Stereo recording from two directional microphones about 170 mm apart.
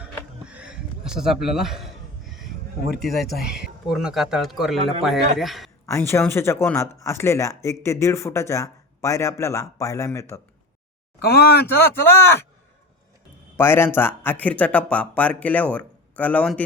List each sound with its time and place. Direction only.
0.4 s a sound: 5° right (ahead or behind)
3.0 s speech: centre (ahead or behind)
5.8 s speech: 15° left (ahead or behind)
11.2 s speech: 70° left (ahead or behind)
12.0 s speech: 15° left (ahead or behind)
13.6 s speech: 15° left (ahead or behind)